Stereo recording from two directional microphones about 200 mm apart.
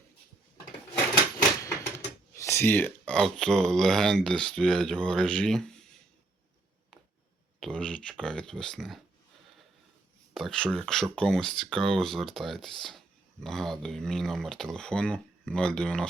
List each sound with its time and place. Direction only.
1.4 s a sound: 15° left (ahead or behind)
2.3 s speech: 15° left (ahead or behind)
7.6 s speech: 5° left (ahead or behind)
10.3 s speech: 5° left (ahead or behind)